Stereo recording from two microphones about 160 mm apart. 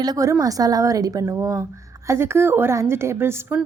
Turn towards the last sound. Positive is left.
turn(degrees=-15)  # may be behind; listen again after turning